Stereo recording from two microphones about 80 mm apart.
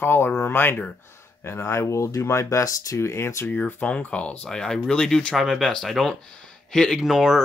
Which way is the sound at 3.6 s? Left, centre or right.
Centre.